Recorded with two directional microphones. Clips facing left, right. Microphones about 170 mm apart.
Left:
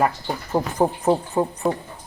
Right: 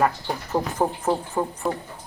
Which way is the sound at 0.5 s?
15° left (ahead or behind).